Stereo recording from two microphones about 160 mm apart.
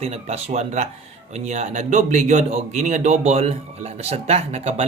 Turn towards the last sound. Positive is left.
turn(degrees=-40)  # may be behind; listen again after turning